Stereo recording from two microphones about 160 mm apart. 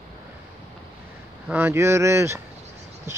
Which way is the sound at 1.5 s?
15° right (ahead or behind).